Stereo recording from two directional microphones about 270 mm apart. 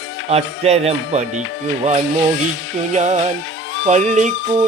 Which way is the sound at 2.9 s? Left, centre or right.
Right.